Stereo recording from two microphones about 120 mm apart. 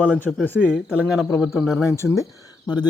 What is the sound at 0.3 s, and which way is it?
Speech, centre (ahead or behind).